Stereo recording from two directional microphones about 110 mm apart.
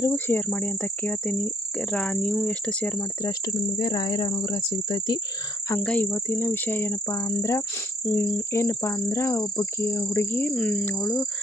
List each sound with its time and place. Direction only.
0.1 s speech: 20° left (ahead or behind)
3.0 s speech: 30° left (ahead or behind)
5.8 s speech: 10° left (ahead or behind)